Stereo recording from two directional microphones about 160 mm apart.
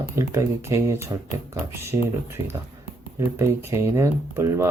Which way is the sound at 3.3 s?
15° right (ahead or behind).